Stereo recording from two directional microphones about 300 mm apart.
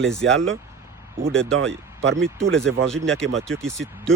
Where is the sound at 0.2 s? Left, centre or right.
Right.